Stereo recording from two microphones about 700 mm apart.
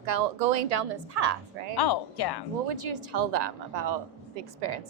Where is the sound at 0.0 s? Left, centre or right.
Right.